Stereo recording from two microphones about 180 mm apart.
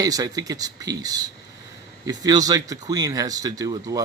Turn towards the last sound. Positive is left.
turn(degrees=-20)  # may be behind; listen again after turning